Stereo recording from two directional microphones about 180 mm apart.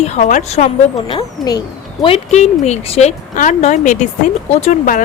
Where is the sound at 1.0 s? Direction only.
25° left (ahead or behind).